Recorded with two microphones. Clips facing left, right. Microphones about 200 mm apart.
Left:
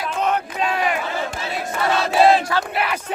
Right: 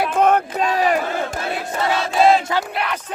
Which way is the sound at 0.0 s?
50° right (ahead or behind).